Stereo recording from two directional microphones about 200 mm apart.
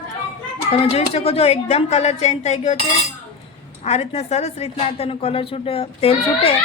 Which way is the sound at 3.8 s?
30° left (ahead or behind).